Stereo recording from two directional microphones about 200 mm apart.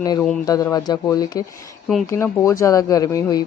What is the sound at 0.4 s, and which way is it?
Speech, 20° left (ahead or behind).